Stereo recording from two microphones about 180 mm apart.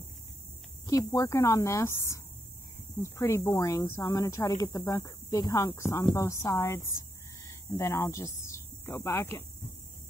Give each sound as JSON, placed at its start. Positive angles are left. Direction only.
{"t": 0.8, "sound": "speech", "side_deg": 20}